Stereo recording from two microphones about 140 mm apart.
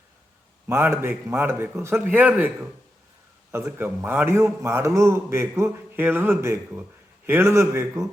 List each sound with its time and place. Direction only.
0.7 s a man's voice: 15° right (ahead or behind)